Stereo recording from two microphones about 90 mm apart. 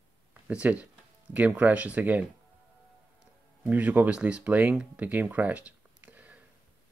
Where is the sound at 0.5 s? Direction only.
15° right (ahead or behind).